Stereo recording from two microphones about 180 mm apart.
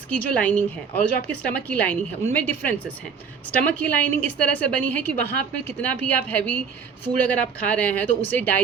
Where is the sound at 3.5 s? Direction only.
10° left (ahead or behind).